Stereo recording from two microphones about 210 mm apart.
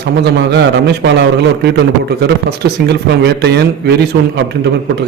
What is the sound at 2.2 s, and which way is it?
Speech, 50° right (ahead or behind).